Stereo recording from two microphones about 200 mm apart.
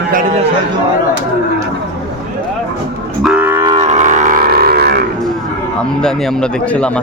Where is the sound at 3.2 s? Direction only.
5° right (ahead or behind).